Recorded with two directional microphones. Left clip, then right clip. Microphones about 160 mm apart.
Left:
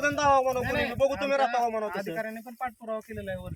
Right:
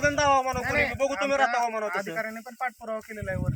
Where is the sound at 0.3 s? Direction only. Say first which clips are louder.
Even; 15° right (ahead or behind).